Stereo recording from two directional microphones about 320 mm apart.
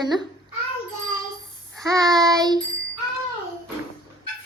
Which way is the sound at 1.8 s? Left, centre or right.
Centre.